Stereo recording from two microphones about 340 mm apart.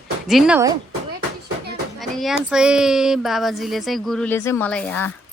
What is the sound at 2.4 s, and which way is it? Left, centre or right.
Speech, centre.